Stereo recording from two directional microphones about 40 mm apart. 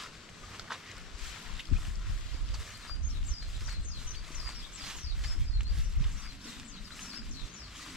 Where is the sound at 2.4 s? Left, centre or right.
Centre.